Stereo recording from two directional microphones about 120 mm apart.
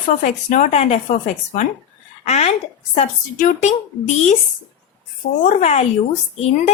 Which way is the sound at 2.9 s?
80° left.